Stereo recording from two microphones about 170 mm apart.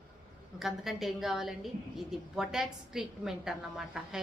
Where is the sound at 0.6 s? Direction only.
Centre (ahead or behind).